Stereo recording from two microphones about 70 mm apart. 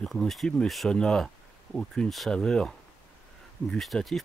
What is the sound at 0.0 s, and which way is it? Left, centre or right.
Speech, centre.